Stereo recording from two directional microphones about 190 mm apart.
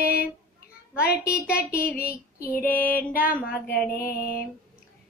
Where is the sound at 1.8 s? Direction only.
50° left (ahead or behind).